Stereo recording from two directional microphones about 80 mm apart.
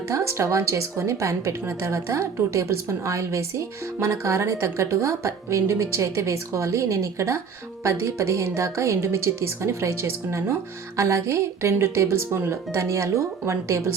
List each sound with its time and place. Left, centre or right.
0.1 s a woman's voice: right